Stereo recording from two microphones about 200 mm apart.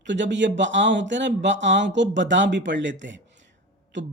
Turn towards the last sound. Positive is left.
turn(degrees=-65)  # may be behind; listen again after turning